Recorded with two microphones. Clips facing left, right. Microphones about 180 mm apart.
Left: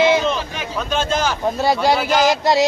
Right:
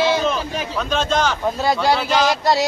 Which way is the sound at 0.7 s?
5° left (ahead or behind).